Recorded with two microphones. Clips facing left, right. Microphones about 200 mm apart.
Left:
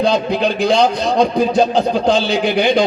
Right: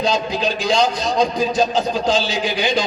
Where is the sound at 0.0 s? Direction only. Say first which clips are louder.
Left 4 dB; 60° left (ahead or behind).